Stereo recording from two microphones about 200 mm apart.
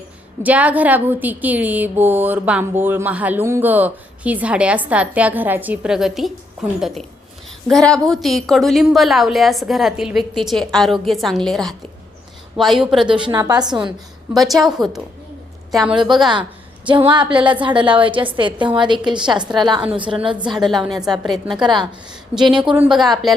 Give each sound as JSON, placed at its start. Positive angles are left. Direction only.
{"t": 0.4, "sound": "a woman's voice", "side_deg": -5}
{"t": 13.2, "sound": "a woman's voice", "side_deg": -20}
{"t": 14.3, "sound": "a woman's voice", "side_deg": 0}
{"t": 16.8, "sound": "a woman's voice", "side_deg": -25}
{"t": 19.8, "sound": "a woman's voice", "side_deg": -5}
{"t": 20.1, "sound": "a woman's voice", "side_deg": -25}
{"t": 20.5, "sound": "a woman's voice", "side_deg": 0}
{"t": 21.6, "sound": "a woman's voice", "side_deg": -25}
{"t": 22.1, "sound": "a woman's voice", "side_deg": -5}